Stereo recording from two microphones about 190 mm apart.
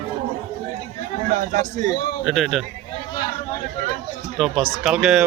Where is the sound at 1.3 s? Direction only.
40° right (ahead or behind).